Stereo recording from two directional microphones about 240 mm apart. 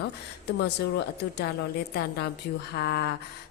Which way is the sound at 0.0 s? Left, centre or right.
Left.